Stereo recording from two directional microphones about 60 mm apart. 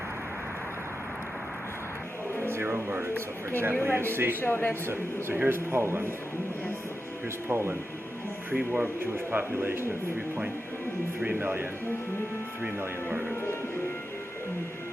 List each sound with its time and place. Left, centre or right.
2.5 s music: right
3.6 s speech: right
4.4 s speech: left
5.5 s speech: right
7.4 s speech: right
8.5 s speech: right
9.0 s speech: right
11.3 s speech: right
13.3 s music: left